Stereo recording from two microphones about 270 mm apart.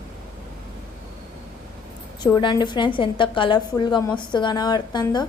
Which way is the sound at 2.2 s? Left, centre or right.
Centre.